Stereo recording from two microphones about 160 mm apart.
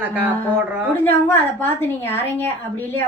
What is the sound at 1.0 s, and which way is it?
A woman's voice, 15° left (ahead or behind).